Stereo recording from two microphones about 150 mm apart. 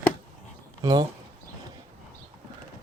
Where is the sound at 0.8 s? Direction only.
25° right (ahead or behind).